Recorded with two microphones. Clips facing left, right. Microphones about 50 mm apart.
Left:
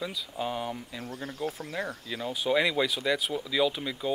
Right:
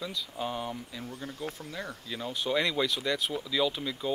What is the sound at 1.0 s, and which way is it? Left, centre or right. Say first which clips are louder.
Speech: left 5 dB; left.